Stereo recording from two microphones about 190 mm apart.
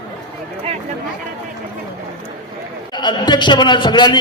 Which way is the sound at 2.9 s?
25° left (ahead or behind).